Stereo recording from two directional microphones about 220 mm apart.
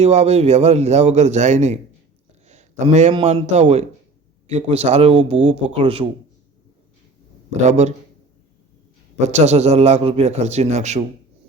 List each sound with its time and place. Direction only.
0.0 s a man's voice: 30° right (ahead or behind)
7.6 s a man's voice: 30° right (ahead or behind)
9.1 s a man's voice: 30° right (ahead or behind)